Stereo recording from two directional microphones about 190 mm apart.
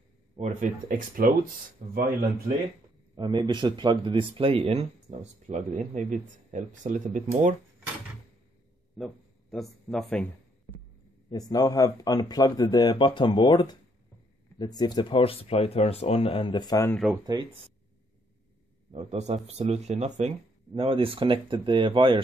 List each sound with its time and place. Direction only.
0.4 s speech: 40° right (ahead or behind)
3.2 s speech: 25° right (ahead or behind); by 7.5 s 40° right (ahead or behind)
8.9 s speech: centre (ahead or behind)
11.2 s speech: 20° left (ahead or behind)
17.1 s speech: 20° right (ahead or behind)
18.9 s speech: 35° right (ahead or behind)